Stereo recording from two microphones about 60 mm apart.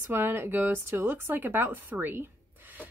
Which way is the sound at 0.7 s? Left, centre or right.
Right.